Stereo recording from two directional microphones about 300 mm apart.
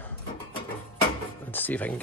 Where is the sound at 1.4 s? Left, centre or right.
Centre.